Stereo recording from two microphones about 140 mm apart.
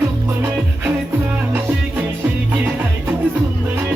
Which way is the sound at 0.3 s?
15° right (ahead or behind).